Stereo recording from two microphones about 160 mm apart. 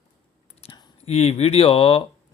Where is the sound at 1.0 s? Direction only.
40° left (ahead or behind).